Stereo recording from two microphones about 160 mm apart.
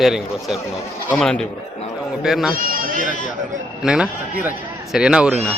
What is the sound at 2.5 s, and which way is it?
Bleat, 60° right (ahead or behind).